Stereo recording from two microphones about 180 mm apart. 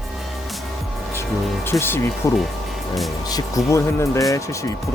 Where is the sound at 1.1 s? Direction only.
15° left (ahead or behind).